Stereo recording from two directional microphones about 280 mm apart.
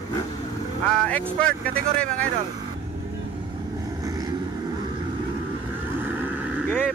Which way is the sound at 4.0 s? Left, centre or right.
Centre.